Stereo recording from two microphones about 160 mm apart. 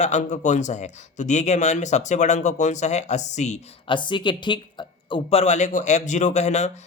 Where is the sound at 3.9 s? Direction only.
30° left (ahead or behind).